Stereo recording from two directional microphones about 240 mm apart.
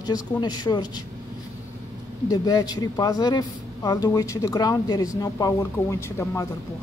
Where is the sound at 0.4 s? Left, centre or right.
Centre.